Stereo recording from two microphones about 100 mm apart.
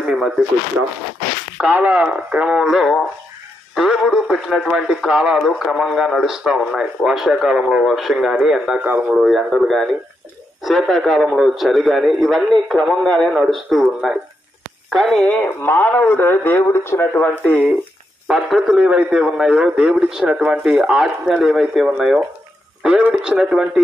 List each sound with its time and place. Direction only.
0.0 s a sound: 5° right (ahead or behind)
1.6 s speech: 15° right (ahead or behind); by 15.5 s 5° left (ahead or behind)
15.6 s a man's voice: 20° left (ahead or behind)
17.1 s speech: 10° left (ahead or behind)
18.3 s speech: 5° right (ahead or behind)